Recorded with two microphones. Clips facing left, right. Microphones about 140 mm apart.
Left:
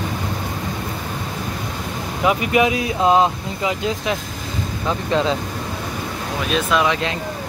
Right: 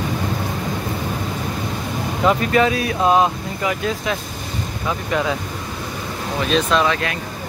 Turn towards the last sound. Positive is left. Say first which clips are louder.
# right 1 dB
turn(degrees=10)  # may be behind; listen again after turning